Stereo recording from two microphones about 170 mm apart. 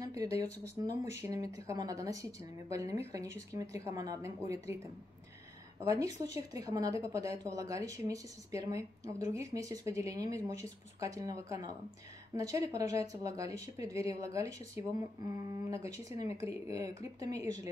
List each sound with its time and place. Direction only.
0.0 s a sound: 20° right (ahead or behind)
0.8 s speech: 20° right (ahead or behind)
5.9 s speech: 20° right (ahead or behind)